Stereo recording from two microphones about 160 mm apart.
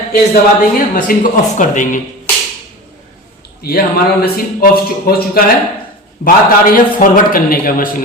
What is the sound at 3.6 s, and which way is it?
A man's voice, 65° left (ahead or behind).